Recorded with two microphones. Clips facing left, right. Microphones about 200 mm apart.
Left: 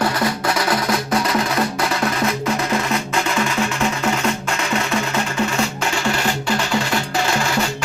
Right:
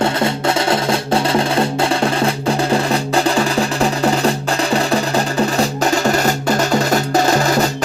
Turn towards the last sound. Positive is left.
turn(degrees=-40)  # may be behind; listen again after turning